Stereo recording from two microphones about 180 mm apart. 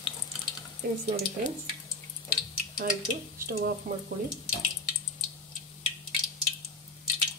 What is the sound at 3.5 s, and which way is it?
Speech, 55° right (ahead or behind).